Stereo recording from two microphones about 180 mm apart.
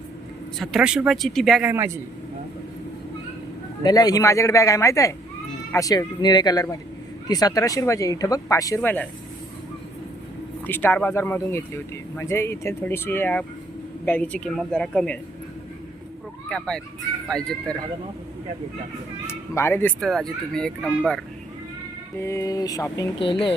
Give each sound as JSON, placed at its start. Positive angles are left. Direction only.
{"t": 0.6, "sound": "speech", "side_deg": -5}
{"t": 1.6, "sound": "a man's voice", "side_deg": -15}
{"t": 3.8, "sound": "speech", "side_deg": 20}
{"t": 10.7, "sound": "speech", "side_deg": 10}
{"t": 16.5, "sound": "speech", "side_deg": 5}
{"t": 19.3, "sound": "speech", "side_deg": 15}
{"t": 22.2, "sound": "speech", "side_deg": 15}